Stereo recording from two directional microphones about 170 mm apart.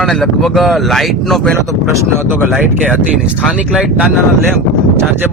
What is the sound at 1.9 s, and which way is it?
Speech, 15° right (ahead or behind).